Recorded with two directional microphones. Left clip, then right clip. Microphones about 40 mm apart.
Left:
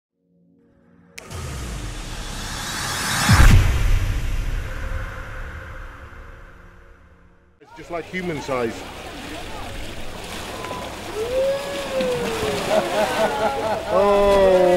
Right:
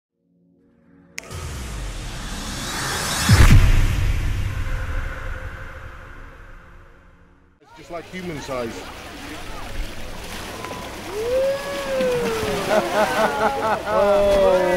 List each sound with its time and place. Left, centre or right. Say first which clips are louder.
1.3 s music: left 1 dB; centre
7.7 s speech: left 4 dB; centre
8.9 s boat: left 2 dB; right